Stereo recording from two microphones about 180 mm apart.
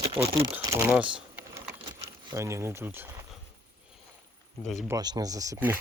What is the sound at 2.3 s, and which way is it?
Speech, 15° right (ahead or behind).